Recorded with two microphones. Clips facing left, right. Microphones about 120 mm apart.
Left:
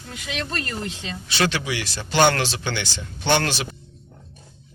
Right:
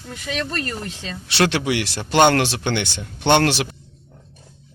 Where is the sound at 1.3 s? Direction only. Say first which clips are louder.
Right 5 dB; 70° right (ahead or behind).